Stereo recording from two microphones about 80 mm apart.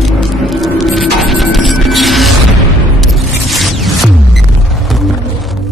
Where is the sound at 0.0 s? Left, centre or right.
Centre.